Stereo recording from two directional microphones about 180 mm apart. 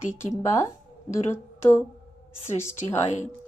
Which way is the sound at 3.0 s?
40° left (ahead or behind).